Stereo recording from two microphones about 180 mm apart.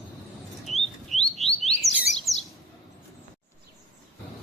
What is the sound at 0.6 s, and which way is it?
Bird, centre (ahead or behind).